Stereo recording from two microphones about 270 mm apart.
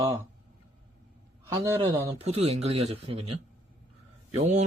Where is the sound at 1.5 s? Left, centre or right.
Centre.